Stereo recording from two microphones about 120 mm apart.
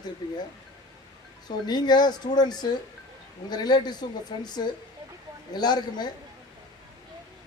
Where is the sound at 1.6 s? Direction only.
35° left (ahead or behind).